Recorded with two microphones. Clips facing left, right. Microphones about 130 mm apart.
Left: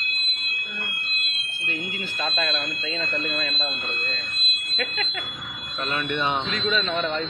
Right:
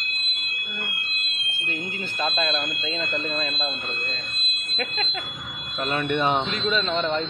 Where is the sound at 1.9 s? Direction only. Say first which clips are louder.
Right 5 dB; 30° right (ahead or behind).